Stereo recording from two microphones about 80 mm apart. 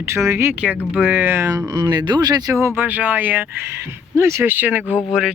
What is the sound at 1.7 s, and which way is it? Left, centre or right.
Speech, right.